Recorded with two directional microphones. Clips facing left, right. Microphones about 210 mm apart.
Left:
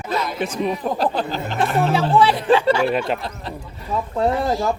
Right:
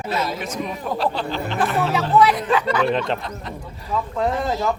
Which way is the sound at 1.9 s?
30° left (ahead or behind).